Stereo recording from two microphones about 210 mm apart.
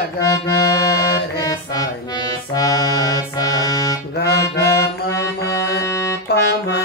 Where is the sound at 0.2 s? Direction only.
15° left (ahead or behind).